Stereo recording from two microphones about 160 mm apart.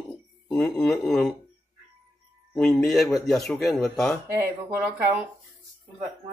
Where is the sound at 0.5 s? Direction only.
5° left (ahead or behind).